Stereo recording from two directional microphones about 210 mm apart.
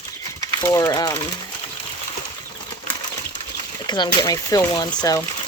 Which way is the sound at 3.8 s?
20° left (ahead or behind).